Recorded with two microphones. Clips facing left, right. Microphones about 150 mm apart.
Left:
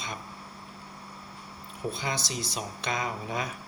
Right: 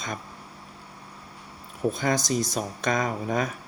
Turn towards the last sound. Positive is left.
turn(degrees=-45)  # may be behind; listen again after turning